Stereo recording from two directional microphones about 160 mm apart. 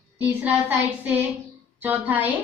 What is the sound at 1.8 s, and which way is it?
Speech, 10° right (ahead or behind).